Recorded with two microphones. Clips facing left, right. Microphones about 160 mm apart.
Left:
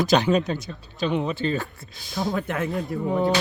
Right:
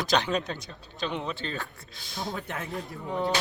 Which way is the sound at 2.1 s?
90° left.